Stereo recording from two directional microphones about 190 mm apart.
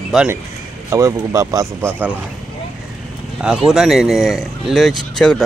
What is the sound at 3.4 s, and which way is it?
Speech, 5° right (ahead or behind).